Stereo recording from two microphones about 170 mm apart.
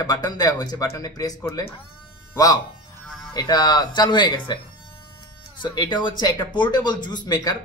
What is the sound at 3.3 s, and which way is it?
Speech, 25° left (ahead or behind).